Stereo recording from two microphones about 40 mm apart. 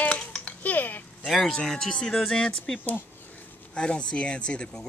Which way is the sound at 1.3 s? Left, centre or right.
Centre.